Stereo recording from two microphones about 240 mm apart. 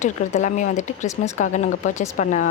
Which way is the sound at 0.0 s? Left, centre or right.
Left.